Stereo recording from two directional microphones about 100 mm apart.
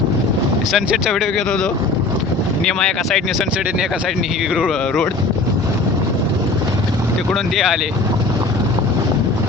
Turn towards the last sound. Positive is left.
turn(degrees=-5)  # may be behind; listen again after turning